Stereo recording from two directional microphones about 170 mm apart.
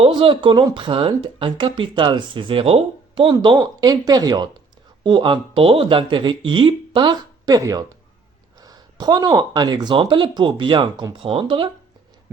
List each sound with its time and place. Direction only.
0.0 s speech: 30° right (ahead or behind)